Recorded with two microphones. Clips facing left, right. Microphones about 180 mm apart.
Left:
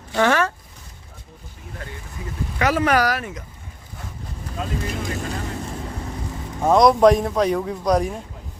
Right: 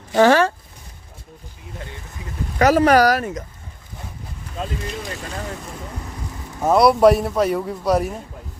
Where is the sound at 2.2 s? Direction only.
20° right (ahead or behind).